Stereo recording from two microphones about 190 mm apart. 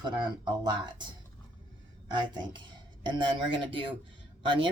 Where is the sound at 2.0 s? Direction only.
25° right (ahead or behind).